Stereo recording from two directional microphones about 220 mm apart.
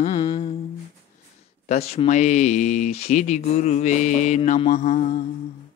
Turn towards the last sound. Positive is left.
turn(degrees=30)  # may be behind; listen again after turning